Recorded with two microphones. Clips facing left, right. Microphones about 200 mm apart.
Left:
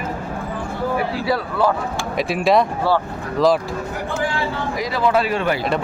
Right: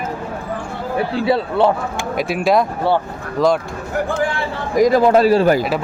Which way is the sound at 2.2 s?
Centre (ahead or behind).